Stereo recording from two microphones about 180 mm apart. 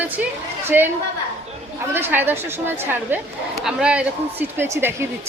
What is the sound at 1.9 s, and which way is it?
A woman's voice, 10° right (ahead or behind).